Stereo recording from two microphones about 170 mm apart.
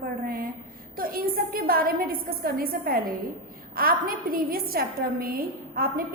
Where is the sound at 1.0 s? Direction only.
60° right (ahead or behind).